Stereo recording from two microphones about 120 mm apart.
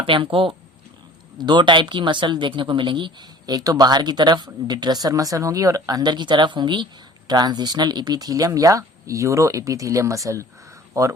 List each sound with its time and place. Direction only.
0.0 s a woman's voice: 45° right (ahead or behind); by 11.1 s 25° right (ahead or behind)